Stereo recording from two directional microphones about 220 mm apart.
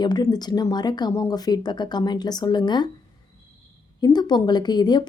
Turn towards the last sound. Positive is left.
turn(degrees=20)  # may be behind; listen again after turning